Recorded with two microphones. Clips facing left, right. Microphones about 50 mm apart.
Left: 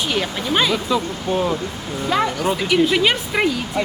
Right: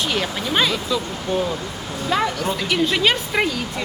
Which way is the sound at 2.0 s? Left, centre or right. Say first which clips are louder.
Left 2 dB; centre.